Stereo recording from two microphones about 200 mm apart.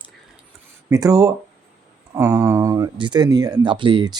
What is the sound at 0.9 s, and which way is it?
Speech, 20° right (ahead or behind).